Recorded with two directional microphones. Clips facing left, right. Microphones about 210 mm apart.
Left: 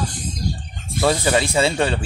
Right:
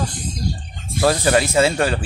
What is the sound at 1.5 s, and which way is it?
Speech, 5° right (ahead or behind).